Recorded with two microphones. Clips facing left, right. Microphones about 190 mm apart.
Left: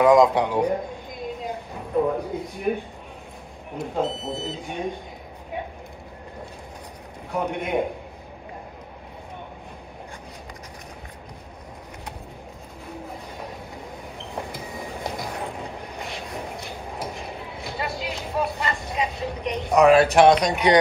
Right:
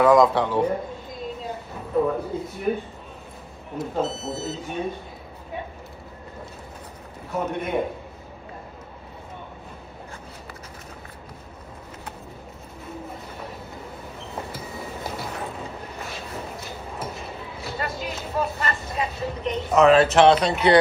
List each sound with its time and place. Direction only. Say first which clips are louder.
0.0 s a man's voice: left 1 dB; 15° left (ahead or behind)
1.4 s a sound: left 1 dB; 15° left (ahead or behind)
3.9 s a man's voice: left 1 dB; 15° left (ahead or behind)
7.2 s a man's voice: even; 15° left (ahead or behind)
14.2 s vehicle: left 1 dB; 15° left (ahead or behind)